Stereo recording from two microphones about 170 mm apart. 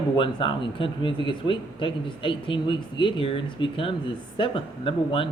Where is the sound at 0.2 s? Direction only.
30° left (ahead or behind).